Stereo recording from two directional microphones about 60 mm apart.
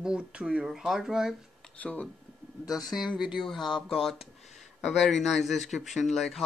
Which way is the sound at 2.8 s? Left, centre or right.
Centre.